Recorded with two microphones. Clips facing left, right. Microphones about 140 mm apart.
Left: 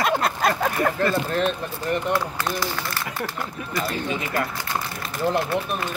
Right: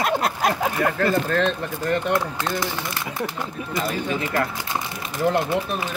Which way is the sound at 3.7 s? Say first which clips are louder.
Right 1 dB; 20° right (ahead or behind).